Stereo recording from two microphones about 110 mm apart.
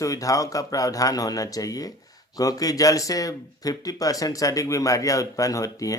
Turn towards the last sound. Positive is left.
turn(degrees=30)  # may be behind; listen again after turning